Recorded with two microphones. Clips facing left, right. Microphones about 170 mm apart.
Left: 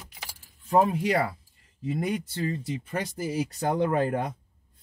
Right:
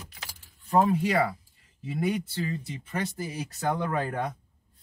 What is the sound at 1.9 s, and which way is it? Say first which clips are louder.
Speech: even; 40° left (ahead or behind).